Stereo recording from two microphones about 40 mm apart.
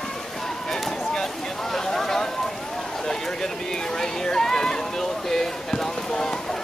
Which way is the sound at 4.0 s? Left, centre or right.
Centre.